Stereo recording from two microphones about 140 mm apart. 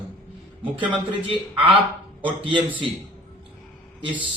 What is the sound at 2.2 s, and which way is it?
Speech, 40° right (ahead or behind).